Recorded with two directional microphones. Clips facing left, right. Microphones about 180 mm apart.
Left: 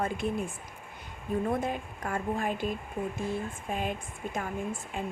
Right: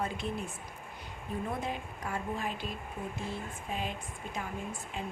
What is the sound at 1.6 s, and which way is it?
Speech, 50° left (ahead or behind).